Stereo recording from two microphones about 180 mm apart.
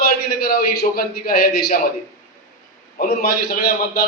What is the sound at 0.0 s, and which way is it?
A man's voice, 60° left (ahead or behind).